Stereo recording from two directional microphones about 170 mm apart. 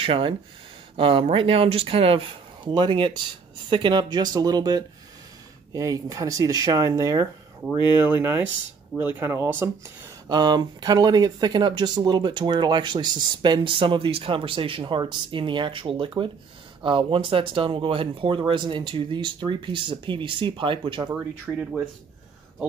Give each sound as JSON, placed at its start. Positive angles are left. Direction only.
{"t": 0.0, "sound": "speech", "side_deg": -30}
{"t": 21.1, "sound": "speech", "side_deg": -10}